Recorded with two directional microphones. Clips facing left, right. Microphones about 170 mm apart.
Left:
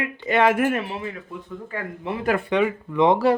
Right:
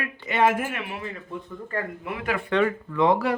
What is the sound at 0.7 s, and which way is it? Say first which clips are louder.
Speech: left 8 dB; 40° left (ahead or behind).